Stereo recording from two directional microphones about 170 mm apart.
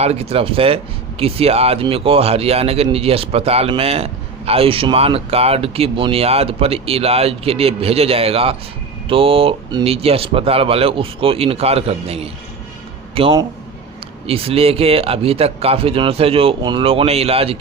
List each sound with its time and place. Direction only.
0.0 s speech: 35° right (ahead or behind)